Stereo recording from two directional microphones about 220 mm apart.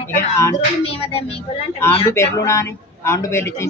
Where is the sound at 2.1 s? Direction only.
15° left (ahead or behind).